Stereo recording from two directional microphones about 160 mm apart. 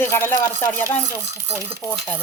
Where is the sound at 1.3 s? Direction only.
15° right (ahead or behind).